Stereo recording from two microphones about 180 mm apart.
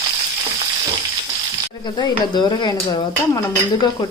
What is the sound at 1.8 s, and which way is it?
Speech, 25° left (ahead or behind).